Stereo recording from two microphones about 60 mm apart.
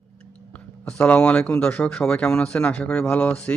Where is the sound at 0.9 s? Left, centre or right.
Left.